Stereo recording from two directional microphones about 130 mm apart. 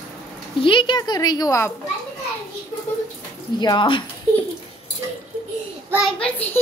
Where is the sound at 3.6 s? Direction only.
35° left (ahead or behind).